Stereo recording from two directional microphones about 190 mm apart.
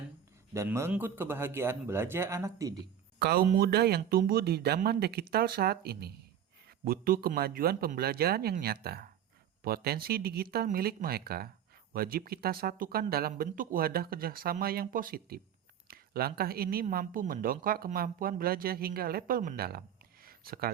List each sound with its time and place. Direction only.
0.5 s a man's voice: 15° right (ahead or behind)
3.2 s speech: 55° right (ahead or behind)
20.2 s a sound: 50° right (ahead or behind)